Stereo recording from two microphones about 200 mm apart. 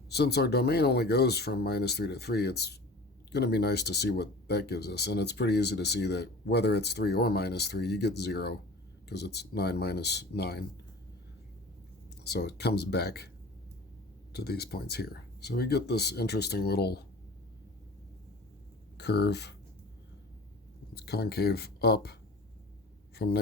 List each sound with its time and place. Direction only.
0.1 s speech: 55° left (ahead or behind)
12.2 s speech: 55° left (ahead or behind)
14.3 s speech: 55° left (ahead or behind)
18.9 s speech: 55° left (ahead or behind)
20.9 s speech: 55° left (ahead or behind)